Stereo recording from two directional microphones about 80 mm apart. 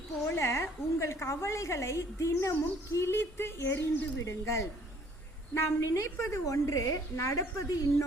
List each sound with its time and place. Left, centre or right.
0.3 s a woman's voice: left